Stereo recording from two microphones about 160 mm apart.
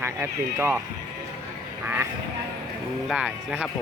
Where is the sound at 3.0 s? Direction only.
5° right (ahead or behind).